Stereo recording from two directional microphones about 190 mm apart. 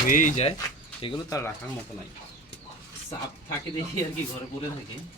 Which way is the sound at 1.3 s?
15° left (ahead or behind).